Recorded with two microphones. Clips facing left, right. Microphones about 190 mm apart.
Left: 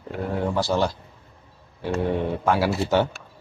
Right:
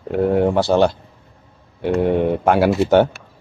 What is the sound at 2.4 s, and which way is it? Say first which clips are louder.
Speech: right 7 dB; 60° right (ahead or behind).